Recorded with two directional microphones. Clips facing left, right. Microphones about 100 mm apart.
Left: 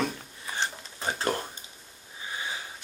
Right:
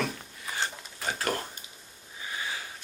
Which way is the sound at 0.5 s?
25° left (ahead or behind).